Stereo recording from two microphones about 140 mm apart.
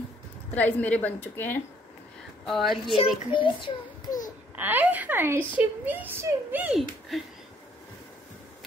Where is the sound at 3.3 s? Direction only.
35° left (ahead or behind).